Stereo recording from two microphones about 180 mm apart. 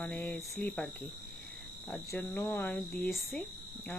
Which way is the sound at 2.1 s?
10° left (ahead or behind).